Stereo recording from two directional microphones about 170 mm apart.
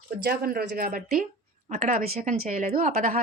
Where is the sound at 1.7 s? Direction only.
50° right (ahead or behind).